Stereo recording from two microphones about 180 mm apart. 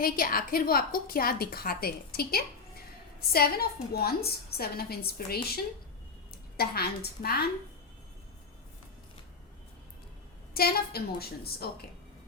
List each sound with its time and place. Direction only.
0.0 s a woman's voice: 55° left (ahead or behind)
10.5 s a woman's voice: 60° left (ahead or behind)